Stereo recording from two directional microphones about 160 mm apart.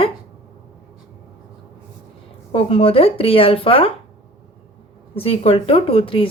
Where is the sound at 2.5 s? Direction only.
35° left (ahead or behind).